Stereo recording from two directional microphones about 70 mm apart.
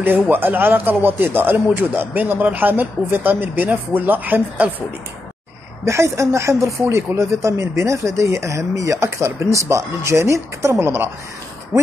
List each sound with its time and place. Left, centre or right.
0.0 s speech: right
5.9 s speech: right